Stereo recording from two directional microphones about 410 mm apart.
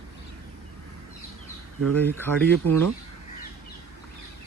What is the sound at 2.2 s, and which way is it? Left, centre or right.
Speech, centre.